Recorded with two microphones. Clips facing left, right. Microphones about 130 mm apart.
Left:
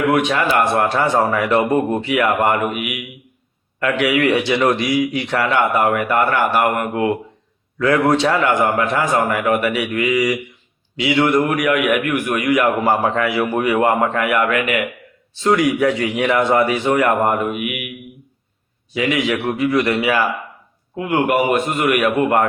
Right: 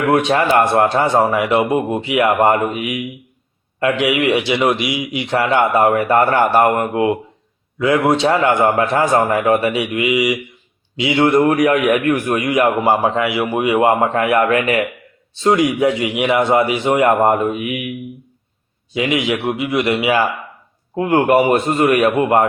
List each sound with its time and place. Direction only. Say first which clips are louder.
0.1 s a man's voice: right 3 dB; 30° right (ahead or behind)
11.0 s a man's voice: right 3 dB; 30° right (ahead or behind)
18.9 s a man's voice: right 1 dB; 20° right (ahead or behind)
20.9 s a man's voice: right 4 dB; 35° right (ahead or behind)